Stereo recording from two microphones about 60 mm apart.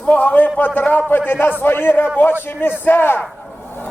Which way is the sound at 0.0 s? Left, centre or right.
Left.